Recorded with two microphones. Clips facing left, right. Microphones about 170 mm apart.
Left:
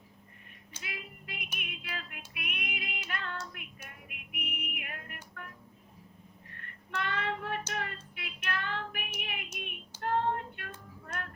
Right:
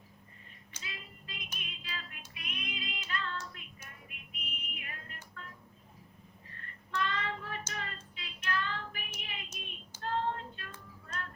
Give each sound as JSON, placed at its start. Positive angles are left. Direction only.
{"t": 0.8, "sound": "music", "side_deg": 60}
{"t": 7.0, "sound": "child singing", "side_deg": 60}
{"t": 9.2, "sound": "a sound", "side_deg": 60}
{"t": 9.6, "sound": "music", "side_deg": 60}